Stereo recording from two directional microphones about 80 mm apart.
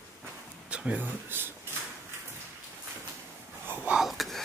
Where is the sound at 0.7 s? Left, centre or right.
Centre.